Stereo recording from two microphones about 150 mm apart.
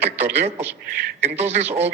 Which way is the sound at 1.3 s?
45° right (ahead or behind).